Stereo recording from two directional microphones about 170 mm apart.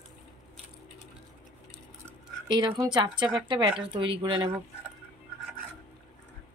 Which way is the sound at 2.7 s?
25° right (ahead or behind).